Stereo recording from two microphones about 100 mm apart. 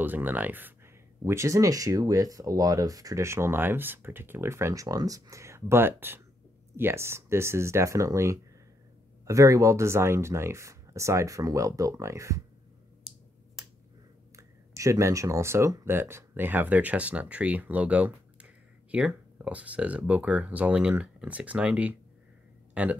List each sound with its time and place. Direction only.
0.0 s speech: 20° right (ahead or behind)
1.2 s speech: 30° right (ahead or behind)
14.3 s speech: 30° right (ahead or behind); by 22.9 s 15° right (ahead or behind)